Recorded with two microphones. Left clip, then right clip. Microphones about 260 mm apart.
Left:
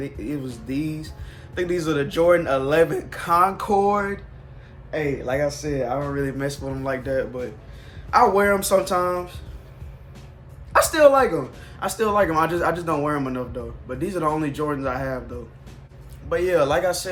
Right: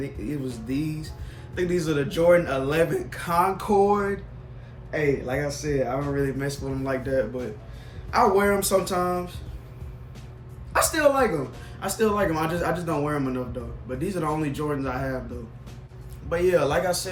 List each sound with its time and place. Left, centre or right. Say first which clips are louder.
0.0 s speech: left 2 dB; centre
10.7 s a woman's voice: left 6 dB; centre
16.3 s speech: left 2 dB; centre